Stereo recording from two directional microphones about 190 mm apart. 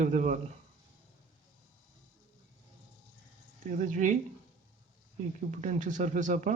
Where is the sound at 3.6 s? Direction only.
40° right (ahead or behind).